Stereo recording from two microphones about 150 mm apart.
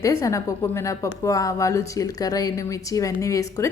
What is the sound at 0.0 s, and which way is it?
A woman's voice, 20° left (ahead or behind).